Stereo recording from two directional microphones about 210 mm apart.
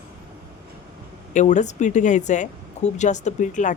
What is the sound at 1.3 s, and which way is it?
A woman's voice, 35° left (ahead or behind).